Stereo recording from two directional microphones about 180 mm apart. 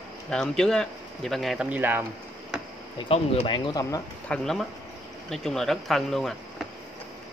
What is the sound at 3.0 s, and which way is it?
Speech, 30° left (ahead or behind).